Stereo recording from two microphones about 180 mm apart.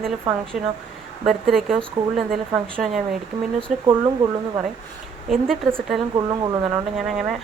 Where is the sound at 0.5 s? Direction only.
5° right (ahead or behind).